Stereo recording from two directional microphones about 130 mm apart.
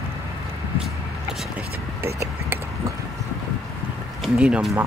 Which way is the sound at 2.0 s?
20° right (ahead or behind).